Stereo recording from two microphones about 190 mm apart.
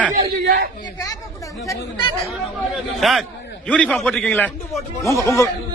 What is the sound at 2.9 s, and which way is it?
A man's voice, centre (ahead or behind).